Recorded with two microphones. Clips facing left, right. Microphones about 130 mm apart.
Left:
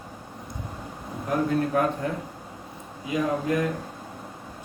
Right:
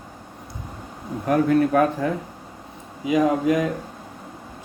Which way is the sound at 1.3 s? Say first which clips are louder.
Right 6 dB; 90° right.